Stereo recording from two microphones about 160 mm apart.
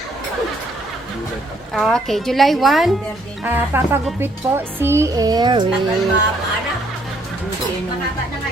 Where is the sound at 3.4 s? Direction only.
15° right (ahead or behind).